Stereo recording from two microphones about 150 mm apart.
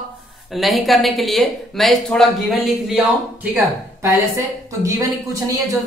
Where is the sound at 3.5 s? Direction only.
20° right (ahead or behind).